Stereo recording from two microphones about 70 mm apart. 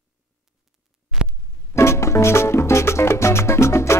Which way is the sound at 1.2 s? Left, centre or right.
Centre.